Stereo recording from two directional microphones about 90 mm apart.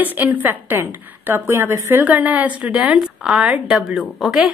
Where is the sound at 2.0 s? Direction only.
15° right (ahead or behind).